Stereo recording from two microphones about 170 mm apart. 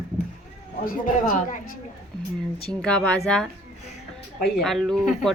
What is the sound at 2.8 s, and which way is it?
Speech, 5° left (ahead or behind).